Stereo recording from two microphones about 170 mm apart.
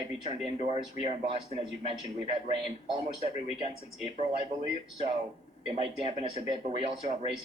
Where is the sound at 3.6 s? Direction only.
35° right (ahead or behind).